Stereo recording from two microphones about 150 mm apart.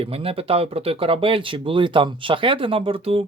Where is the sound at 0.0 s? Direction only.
40° right (ahead or behind).